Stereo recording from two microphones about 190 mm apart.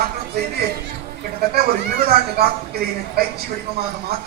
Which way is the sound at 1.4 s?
55° right (ahead or behind).